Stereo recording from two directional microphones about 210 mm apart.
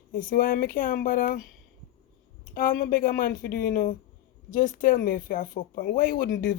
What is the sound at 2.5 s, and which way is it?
Speech, 40° left (ahead or behind).